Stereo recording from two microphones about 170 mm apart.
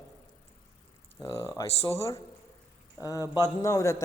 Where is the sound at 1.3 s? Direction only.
15° left (ahead or behind).